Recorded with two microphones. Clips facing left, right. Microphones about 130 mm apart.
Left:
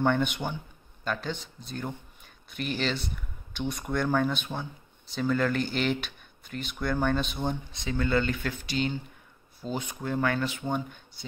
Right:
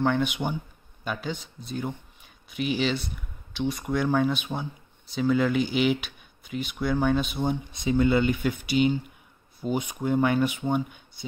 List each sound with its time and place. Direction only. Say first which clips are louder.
0.0 s speech: right 1 dB; centre (ahead or behind)
7.8 s speech: right 5 dB; 15° right (ahead or behind)